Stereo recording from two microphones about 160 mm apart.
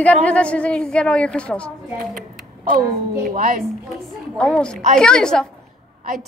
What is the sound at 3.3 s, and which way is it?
Speech, 55° right (ahead or behind).